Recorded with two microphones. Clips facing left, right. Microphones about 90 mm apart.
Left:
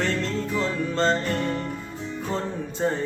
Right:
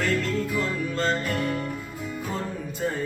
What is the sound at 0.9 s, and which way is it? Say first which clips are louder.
Music: left 4 dB; 30° left (ahead or behind).